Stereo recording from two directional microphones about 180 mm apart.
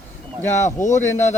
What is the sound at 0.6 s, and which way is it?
Speech, 40° left (ahead or behind).